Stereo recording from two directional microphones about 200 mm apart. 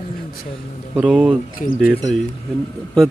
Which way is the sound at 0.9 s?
5° right (ahead or behind).